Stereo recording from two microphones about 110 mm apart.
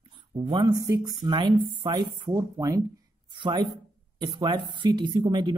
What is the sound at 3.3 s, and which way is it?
Speech, 45° right (ahead or behind).